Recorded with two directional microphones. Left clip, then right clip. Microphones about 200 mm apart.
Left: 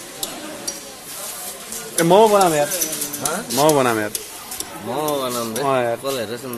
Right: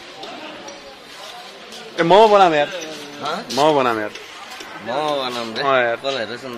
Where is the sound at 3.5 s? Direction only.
5° right (ahead or behind).